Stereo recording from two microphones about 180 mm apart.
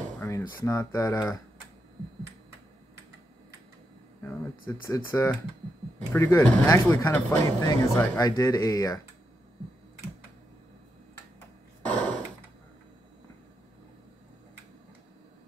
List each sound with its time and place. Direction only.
0.2 s speech: 15° left (ahead or behind)
4.8 s speech: 15° left (ahead or behind)
11.8 s a sound: 5° left (ahead or behind)